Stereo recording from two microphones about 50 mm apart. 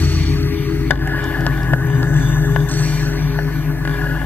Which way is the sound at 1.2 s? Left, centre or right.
Left.